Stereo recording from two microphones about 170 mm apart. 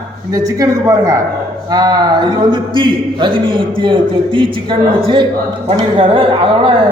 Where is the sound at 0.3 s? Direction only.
20° right (ahead or behind).